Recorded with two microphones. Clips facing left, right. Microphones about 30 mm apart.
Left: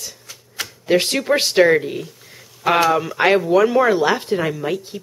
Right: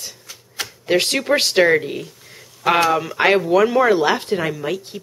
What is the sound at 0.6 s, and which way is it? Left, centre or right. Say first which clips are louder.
Speech: left 1 dB; centre.